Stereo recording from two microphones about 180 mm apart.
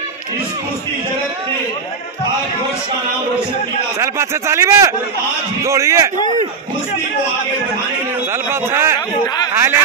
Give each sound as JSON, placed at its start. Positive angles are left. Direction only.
{"t": 4.0, "sound": "speech", "side_deg": -15}
{"t": 8.5, "sound": "speech", "side_deg": -15}